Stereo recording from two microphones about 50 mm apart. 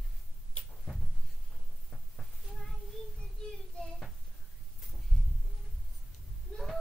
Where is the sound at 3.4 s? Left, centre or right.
Centre.